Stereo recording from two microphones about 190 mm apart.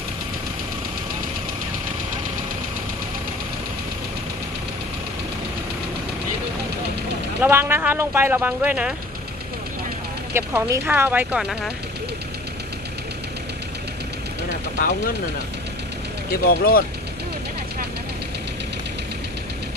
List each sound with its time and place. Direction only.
7.4 s speech: 10° right (ahead or behind)
10.3 s speech: 15° right (ahead or behind)
14.8 s speech: 40° left (ahead or behind)
16.5 s speech: 50° left (ahead or behind)